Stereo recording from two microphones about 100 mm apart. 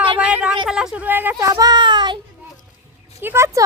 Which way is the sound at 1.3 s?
35° right (ahead or behind).